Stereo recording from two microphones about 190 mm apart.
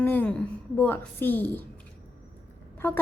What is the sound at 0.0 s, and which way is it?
A woman's voice, 10° left (ahead or behind).